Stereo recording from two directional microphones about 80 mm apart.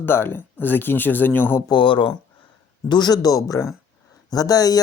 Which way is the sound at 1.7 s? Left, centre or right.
Left.